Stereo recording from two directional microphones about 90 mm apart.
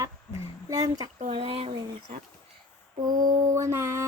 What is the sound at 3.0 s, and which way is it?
Mantra, 45° right (ahead or behind).